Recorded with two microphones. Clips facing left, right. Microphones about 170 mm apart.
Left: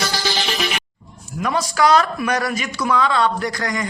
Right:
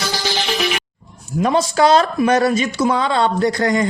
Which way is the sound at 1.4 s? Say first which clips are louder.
Right 4 dB; 25° right (ahead or behind).